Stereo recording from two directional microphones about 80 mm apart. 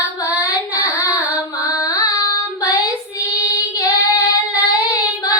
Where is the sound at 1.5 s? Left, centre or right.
Left.